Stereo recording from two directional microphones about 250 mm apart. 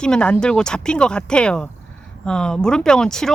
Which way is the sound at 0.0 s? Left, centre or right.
Centre.